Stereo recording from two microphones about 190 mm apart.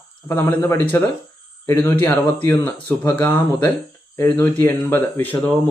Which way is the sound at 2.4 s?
10° left (ahead or behind).